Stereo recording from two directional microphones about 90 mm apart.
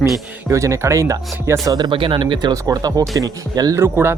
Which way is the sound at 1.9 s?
70° right (ahead or behind).